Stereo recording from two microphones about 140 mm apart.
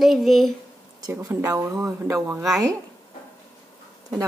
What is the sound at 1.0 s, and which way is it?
A woman's voice, 25° right (ahead or behind).